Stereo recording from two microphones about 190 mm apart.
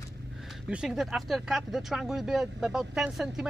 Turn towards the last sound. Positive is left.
turn(degrees=0)  # may be behind; listen again after turning